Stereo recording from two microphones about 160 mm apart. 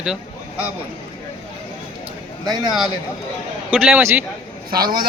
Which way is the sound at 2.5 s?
25° right (ahead or behind).